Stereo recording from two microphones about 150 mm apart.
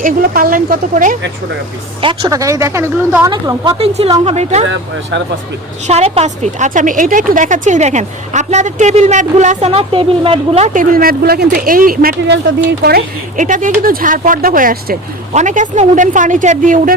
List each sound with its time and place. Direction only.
0.0 s speech: 80° right
2.0 s a woman's voice: 35° right (ahead or behind)
2.3 s speech: 20° right (ahead or behind)
3.8 s a woman's voice: 40° right (ahead or behind)
5.9 s a woman's voice: 45° right (ahead or behind)
10.8 s speech: 75° right (ahead or behind)
15.3 s speech: 55° right (ahead or behind)